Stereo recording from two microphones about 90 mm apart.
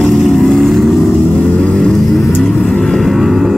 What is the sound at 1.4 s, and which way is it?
Music, 10° left (ahead or behind).